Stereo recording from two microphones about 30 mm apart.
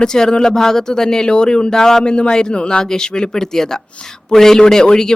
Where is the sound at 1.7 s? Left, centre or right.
Centre.